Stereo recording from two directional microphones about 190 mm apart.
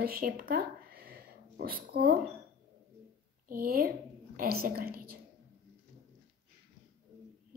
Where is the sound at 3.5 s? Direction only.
50° right (ahead or behind).